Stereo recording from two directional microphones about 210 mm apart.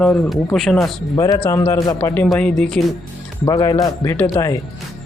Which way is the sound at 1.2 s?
20° left (ahead or behind).